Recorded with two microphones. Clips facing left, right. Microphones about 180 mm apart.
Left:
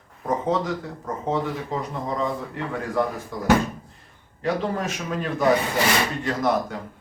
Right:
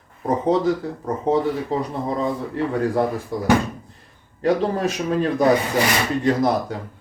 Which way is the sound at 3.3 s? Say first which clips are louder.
Even; 35° right (ahead or behind).